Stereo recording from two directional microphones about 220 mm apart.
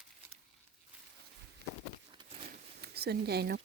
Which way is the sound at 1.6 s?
50° right (ahead or behind).